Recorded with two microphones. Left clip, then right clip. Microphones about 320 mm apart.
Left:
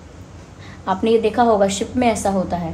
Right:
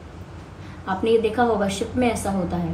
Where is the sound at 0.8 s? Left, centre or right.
Left.